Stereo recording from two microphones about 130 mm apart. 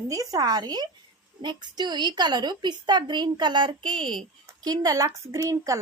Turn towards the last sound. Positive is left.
turn(degrees=-25)  # may be behind; listen again after turning